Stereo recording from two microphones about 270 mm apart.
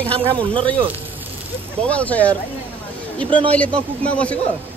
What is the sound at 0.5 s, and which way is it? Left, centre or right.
Speech, centre.